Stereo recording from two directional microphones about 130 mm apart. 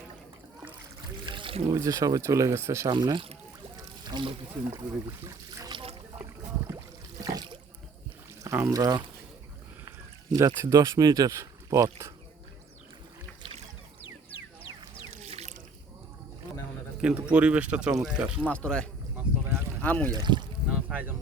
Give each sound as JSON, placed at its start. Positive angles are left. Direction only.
{"t": 1.2, "sound": "music", "side_deg": -40}
{"t": 1.7, "sound": "speech", "side_deg": -25}
{"t": 2.9, "sound": "speech", "side_deg": -35}
{"t": 5.5, "sound": "a sound", "side_deg": -30}
{"t": 7.2, "sound": "water", "side_deg": -35}
{"t": 8.4, "sound": "speech", "side_deg": -25}
{"t": 10.3, "sound": "speech", "side_deg": -25}
{"t": 15.2, "sound": "a sound", "side_deg": -55}
{"t": 17.0, "sound": "speech", "side_deg": -10}
{"t": 18.4, "sound": "speech", "side_deg": 10}
{"t": 20.1, "sound": "speech", "side_deg": -35}
{"t": 20.7, "sound": "speech", "side_deg": -10}